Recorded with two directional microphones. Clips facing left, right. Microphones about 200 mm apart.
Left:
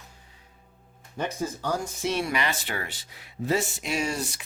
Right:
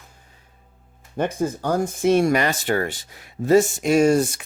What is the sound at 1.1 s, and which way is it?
Speech, 55° right (ahead or behind).